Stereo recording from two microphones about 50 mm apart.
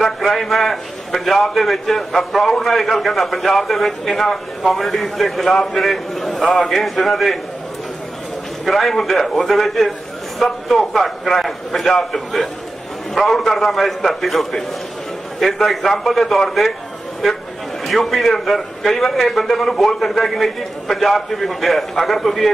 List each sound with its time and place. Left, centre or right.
0.0 s a man's voice: centre
6.4 s a man's voice: centre
6.7 s a man's voice: centre
8.6 s a man's voice: centre
17.8 s a man's voice: centre